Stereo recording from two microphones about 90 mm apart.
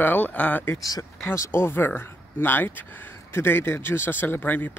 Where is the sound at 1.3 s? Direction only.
30° left (ahead or behind).